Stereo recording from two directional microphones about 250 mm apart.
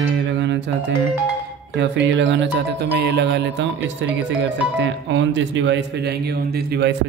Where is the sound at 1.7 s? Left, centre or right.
Right.